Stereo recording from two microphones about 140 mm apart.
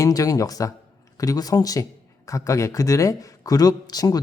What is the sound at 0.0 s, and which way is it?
A man's voice, 25° left (ahead or behind).